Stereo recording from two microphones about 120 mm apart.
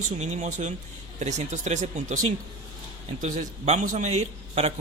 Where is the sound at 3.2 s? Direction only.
80° right; by 4.7 s 65° right (ahead or behind).